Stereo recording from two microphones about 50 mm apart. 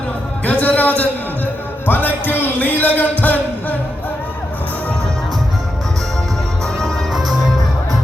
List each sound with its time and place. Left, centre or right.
0.4 s a sound: left
1.9 s music: left
7.1 s music: centre